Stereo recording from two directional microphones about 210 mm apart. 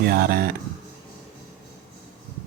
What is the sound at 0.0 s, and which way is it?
Speech, 45° right (ahead or behind).